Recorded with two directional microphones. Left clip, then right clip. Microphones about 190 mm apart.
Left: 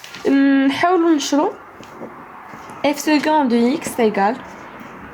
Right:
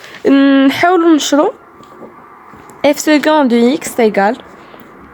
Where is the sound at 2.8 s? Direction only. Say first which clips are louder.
Right 7 dB; 45° right (ahead or behind).